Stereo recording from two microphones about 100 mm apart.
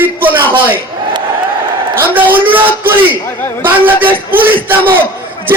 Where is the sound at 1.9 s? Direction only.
20° right (ahead or behind).